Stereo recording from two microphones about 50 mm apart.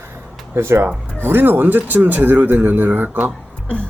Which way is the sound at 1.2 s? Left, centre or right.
Right.